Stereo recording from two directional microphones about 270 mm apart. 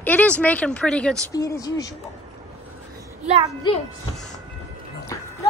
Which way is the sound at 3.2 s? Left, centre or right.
Right.